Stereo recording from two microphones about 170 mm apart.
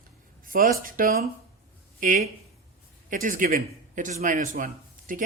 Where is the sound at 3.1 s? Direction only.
55° right (ahead or behind).